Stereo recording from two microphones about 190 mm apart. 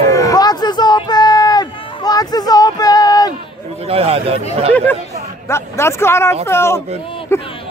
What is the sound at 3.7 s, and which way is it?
Speech, 30° right (ahead or behind).